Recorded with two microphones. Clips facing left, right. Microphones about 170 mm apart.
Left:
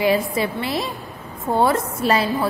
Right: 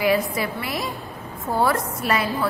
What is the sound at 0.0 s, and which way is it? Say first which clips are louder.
A woman's voice: left 2 dB; 25° left (ahead or behind).